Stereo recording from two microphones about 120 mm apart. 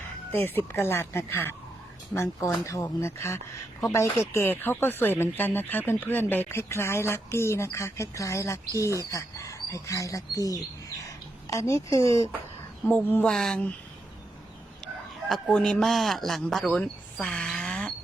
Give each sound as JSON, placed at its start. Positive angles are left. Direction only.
{"t": 0.3, "sound": "speech", "side_deg": 20}
{"t": 2.6, "sound": "speech", "side_deg": 25}
{"t": 12.9, "sound": "speech", "side_deg": 10}
{"t": 15.3, "sound": "speech", "side_deg": 5}